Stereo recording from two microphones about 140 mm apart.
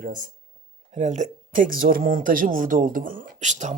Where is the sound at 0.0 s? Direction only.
70° right (ahead or behind).